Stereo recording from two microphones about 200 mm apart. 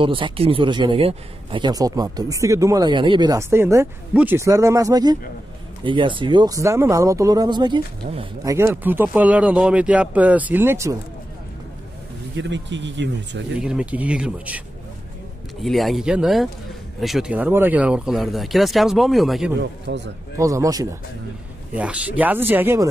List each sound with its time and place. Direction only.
0.0 s speech: 25° right (ahead or behind)
8.5 s speech: 10° right (ahead or behind)
12.4 s speech: 65° right (ahead or behind)
13.6 s speech: 5° right (ahead or behind)
15.6 s speech: centre (ahead or behind)
19.9 s speech: 60° right (ahead or behind)
20.3 s speech: 15° right (ahead or behind)
21.7 s speech: 5° right (ahead or behind)